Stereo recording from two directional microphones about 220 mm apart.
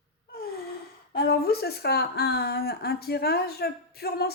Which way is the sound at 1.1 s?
45° left (ahead or behind).